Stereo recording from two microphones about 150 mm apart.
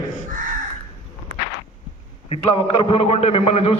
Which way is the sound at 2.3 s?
40° left (ahead or behind).